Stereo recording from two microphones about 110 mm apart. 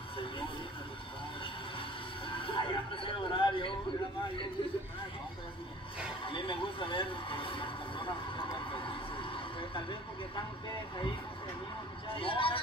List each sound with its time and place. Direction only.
2.2 s music: 55° left (ahead or behind)
6.2 s a sound: 55° left (ahead or behind)
9.6 s vehicle: 50° left (ahead or behind)
12.1 s a man's voice: 55° left (ahead or behind)